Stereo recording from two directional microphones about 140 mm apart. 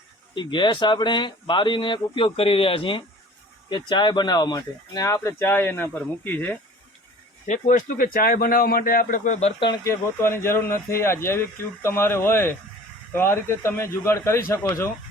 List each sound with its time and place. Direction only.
0.3 s speech: 35° left (ahead or behind); by 6.6 s 10° left (ahead or behind)
7.4 s speech: 60° left (ahead or behind)
9.6 s speech: 30° left (ahead or behind)
9.8 s speech: 20° left (ahead or behind)